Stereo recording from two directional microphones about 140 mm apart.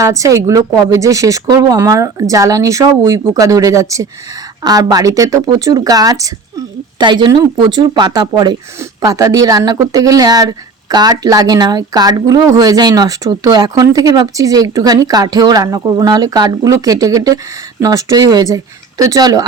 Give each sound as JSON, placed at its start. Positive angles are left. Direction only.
{"t": 0.0, "sound": "speech", "side_deg": -25}